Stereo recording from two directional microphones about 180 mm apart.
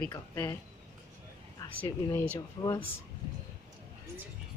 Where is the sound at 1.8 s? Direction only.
15° left (ahead or behind).